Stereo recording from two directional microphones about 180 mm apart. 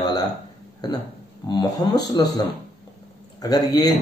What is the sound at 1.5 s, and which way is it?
Speech, 20° left (ahead or behind).